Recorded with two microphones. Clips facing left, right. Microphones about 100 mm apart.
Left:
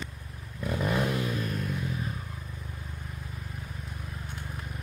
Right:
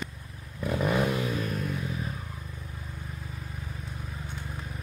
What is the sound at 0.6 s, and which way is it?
Vehicle, 5° right (ahead or behind).